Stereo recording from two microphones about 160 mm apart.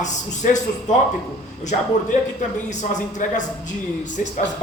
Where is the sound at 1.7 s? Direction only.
55° left (ahead or behind).